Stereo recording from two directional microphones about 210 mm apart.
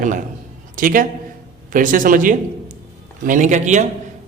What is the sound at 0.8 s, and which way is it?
A man's voice, 40° right (ahead or behind).